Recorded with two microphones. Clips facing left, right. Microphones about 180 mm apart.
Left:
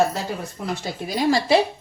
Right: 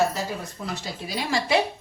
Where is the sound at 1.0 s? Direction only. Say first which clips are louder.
Left 7 dB; 40° left (ahead or behind).